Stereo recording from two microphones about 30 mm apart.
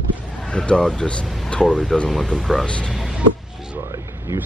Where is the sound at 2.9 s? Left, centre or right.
Centre.